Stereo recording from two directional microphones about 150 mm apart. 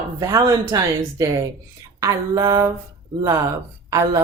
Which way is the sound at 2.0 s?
25° right (ahead or behind).